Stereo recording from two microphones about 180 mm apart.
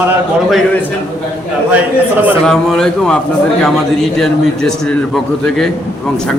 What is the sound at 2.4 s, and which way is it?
A man's voice, 5° left (ahead or behind).